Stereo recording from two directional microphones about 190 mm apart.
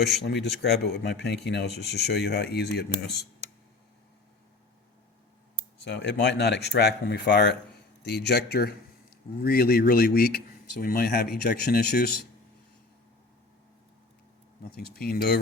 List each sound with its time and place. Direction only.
0.6 s a man's voice: 60° left (ahead or behind)
5.8 s a man's voice: 60° left (ahead or behind)
14.8 s a man's voice: 55° left (ahead or behind)